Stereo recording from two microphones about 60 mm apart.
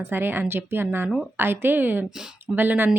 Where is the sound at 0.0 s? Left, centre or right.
Right.